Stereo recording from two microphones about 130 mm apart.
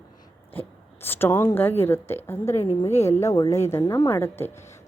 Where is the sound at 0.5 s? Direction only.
15° left (ahead or behind).